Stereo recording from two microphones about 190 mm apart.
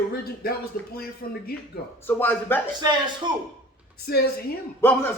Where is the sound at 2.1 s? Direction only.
10° left (ahead or behind).